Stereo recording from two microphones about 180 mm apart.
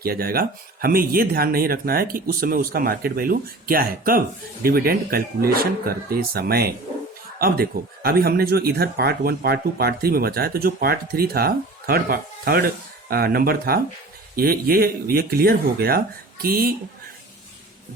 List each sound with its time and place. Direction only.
0.0 s speech: 55° right (ahead or behind)